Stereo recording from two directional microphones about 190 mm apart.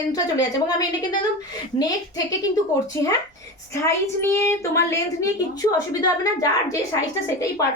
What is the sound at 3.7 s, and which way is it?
A woman's voice, 15° left (ahead or behind).